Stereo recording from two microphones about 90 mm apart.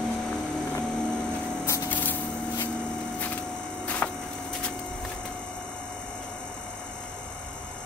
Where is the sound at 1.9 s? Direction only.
20° left (ahead or behind).